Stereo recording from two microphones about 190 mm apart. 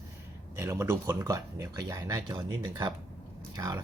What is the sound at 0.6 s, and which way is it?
Speech, 15° right (ahead or behind).